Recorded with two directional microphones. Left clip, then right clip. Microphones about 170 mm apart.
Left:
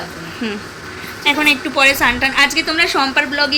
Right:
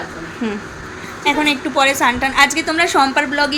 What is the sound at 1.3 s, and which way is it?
A woman's voice, 10° right (ahead or behind).